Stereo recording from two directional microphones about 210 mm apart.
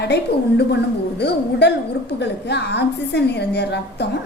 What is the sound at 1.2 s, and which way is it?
A woman's voice, 50° left (ahead or behind).